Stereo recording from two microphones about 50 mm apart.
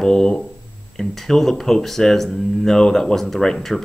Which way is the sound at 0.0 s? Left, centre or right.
Centre.